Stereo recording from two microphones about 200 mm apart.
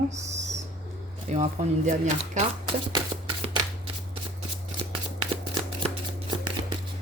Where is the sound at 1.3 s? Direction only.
35° right (ahead or behind).